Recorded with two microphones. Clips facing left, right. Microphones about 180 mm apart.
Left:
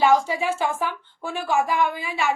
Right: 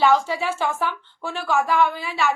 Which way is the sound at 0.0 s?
10° left (ahead or behind).